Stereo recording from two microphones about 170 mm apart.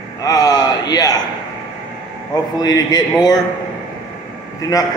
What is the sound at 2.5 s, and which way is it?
Speech, 20° left (ahead or behind).